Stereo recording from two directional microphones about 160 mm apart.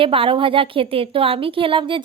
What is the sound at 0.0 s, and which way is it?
A woman's voice, 35° right (ahead or behind).